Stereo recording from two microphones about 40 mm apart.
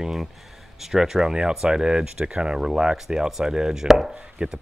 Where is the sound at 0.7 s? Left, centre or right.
Centre.